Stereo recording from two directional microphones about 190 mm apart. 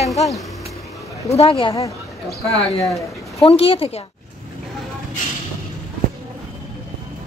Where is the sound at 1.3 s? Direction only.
30° left (ahead or behind).